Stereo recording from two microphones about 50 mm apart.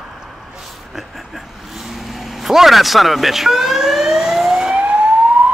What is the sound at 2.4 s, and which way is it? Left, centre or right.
Siren, centre.